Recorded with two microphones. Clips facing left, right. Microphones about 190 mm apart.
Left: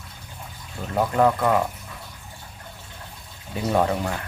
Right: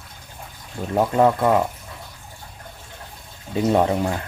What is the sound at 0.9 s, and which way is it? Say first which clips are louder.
Speech: right 3 dB; 20° right (ahead or behind).